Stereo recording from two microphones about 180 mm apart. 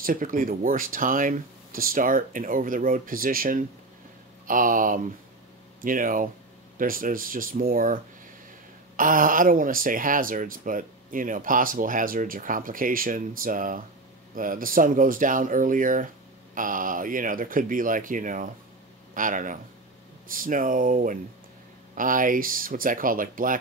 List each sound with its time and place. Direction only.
0.0 s speech: 50° right (ahead or behind)